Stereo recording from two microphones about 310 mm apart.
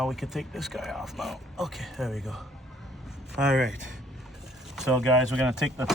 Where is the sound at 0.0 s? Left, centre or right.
Centre.